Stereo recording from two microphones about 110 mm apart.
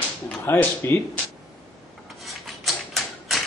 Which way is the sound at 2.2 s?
Centre (ahead or behind).